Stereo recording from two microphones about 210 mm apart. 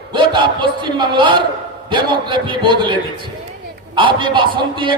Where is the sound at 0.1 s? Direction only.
20° right (ahead or behind).